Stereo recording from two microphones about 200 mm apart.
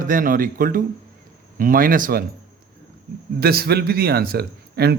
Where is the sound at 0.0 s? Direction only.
45° right (ahead or behind).